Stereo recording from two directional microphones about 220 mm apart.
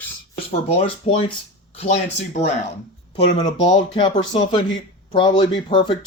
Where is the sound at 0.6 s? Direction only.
25° left (ahead or behind).